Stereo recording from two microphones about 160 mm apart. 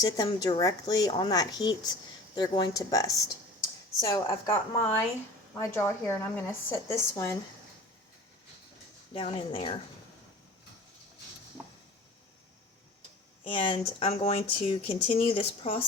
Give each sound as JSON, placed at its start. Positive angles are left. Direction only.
{"t": 0.3, "sound": "a woman's voice", "side_deg": 25}
{"t": 9.1, "sound": "speech", "side_deg": 35}
{"t": 13.4, "sound": "speech", "side_deg": 30}